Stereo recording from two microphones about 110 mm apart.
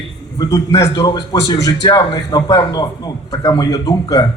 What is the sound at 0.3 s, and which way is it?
A man's voice, 30° left (ahead or behind).